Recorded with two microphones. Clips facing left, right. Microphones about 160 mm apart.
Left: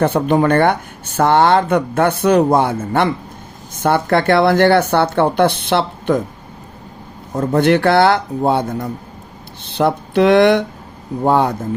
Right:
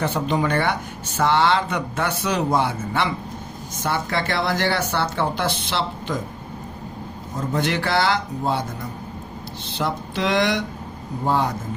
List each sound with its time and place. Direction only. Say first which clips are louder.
0.0 s speech: left 8 dB; 55° left (ahead or behind)
7.3 s speech: left 10 dB; 55° left (ahead or behind)